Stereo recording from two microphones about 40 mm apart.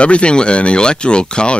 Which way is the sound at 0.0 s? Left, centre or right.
Left.